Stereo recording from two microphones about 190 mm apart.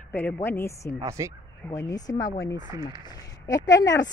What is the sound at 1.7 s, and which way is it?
Speech, 15° left (ahead or behind).